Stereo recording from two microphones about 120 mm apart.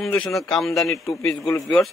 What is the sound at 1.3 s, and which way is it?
Speech, 25° left (ahead or behind).